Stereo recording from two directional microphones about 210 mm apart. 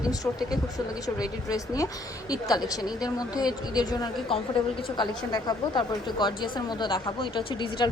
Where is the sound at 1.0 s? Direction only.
15° left (ahead or behind).